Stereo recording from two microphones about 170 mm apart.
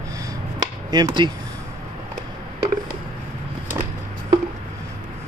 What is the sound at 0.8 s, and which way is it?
Speech, 25° right (ahead or behind).